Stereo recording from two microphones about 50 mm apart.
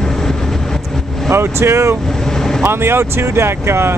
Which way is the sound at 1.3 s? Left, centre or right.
Right.